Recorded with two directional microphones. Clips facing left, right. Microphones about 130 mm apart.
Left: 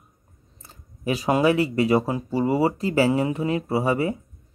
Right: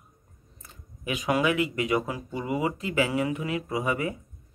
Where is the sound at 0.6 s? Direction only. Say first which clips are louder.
Left 8 dB; 35° left (ahead or behind).